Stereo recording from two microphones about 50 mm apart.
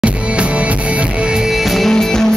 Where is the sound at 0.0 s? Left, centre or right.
Right.